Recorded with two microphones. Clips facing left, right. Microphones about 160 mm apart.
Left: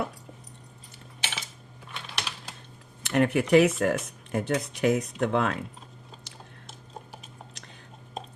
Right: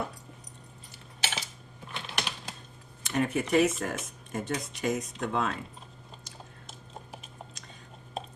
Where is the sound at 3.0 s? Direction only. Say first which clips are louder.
Left 5 dB; 65° left (ahead or behind).